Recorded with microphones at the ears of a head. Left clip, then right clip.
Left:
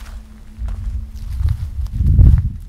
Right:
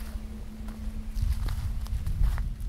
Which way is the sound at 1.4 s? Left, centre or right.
Left.